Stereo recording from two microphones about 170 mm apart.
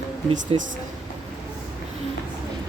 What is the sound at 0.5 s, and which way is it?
Speech, 35° right (ahead or behind).